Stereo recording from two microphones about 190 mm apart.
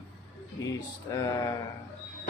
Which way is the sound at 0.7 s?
20° left (ahead or behind).